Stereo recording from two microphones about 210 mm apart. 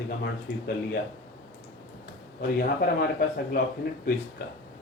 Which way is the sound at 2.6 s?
45° left (ahead or behind).